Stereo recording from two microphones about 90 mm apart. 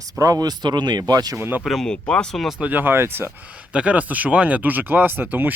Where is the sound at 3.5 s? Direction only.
15° right (ahead or behind).